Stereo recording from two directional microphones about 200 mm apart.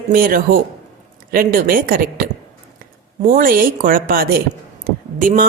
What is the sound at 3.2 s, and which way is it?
Speech, 40° right (ahead or behind).